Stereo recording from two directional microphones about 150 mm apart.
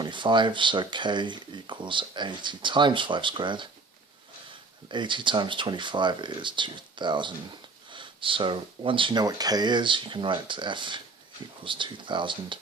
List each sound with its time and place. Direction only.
0.0 s speech: 30° right (ahead or behind)
4.9 s speech: 30° right (ahead or behind)